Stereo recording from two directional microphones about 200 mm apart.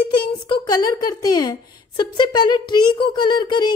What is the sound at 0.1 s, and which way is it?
A woman's voice, 25° left (ahead or behind).